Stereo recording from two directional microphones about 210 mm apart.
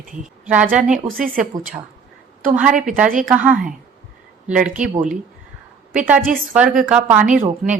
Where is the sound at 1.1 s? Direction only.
40° right (ahead or behind).